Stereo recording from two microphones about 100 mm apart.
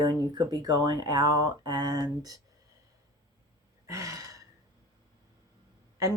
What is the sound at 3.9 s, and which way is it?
Gasp, 35° right (ahead or behind).